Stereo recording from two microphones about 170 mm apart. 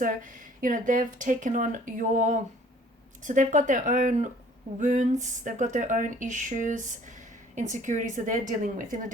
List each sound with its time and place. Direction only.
0.0 s speech: 50° right (ahead or behind)